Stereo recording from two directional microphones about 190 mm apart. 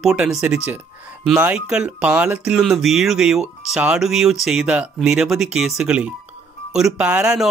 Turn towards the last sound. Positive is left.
turn(degrees=-5)  # may be behind; listen again after turning